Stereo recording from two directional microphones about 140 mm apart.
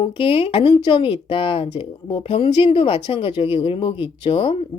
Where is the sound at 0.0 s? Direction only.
40° left (ahead or behind).